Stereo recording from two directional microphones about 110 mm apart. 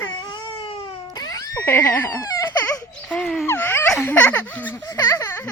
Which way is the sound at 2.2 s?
35° left (ahead or behind).